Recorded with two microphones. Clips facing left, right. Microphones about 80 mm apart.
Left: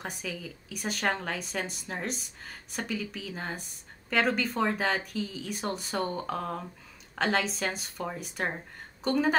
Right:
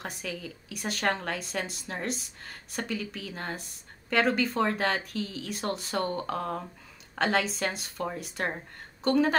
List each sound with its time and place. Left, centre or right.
0.0 s a woman's voice: centre